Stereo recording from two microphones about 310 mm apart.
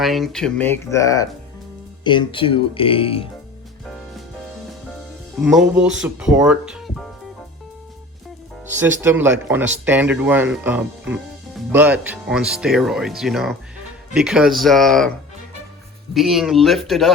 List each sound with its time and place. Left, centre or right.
0.0 s speech: centre
5.4 s speech: centre
8.7 s speech: centre
16.1 s speech: centre